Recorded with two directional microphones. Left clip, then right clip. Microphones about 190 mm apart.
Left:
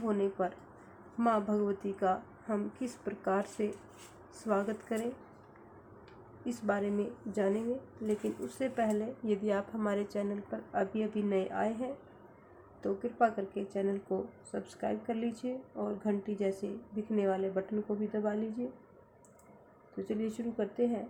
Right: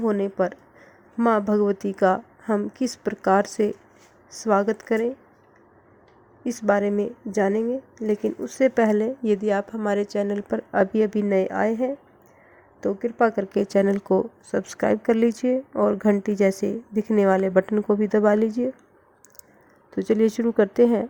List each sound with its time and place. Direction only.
0.0 s a woman's voice: 45° right (ahead or behind)
6.4 s a woman's voice: 45° right (ahead or behind)
10.7 s a woman's voice: 50° right (ahead or behind)
20.0 s a woman's voice: 50° right (ahead or behind)